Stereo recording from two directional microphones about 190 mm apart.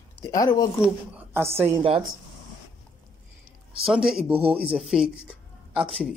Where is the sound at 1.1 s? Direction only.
10° right (ahead or behind).